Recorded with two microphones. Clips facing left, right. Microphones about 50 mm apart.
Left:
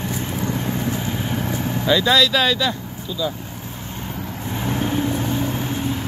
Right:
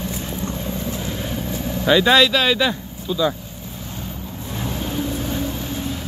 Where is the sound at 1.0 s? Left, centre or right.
Centre.